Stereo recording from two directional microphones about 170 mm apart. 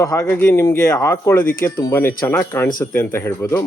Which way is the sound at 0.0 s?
15° left (ahead or behind).